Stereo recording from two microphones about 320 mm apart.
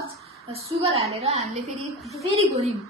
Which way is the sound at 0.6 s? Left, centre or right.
Centre.